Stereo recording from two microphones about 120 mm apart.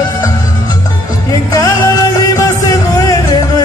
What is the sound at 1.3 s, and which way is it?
Music, 30° left (ahead or behind).